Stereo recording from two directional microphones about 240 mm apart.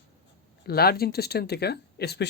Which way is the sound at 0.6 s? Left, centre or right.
Left.